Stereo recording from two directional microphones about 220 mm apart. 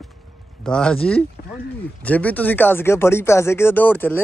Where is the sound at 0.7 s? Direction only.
5° left (ahead or behind).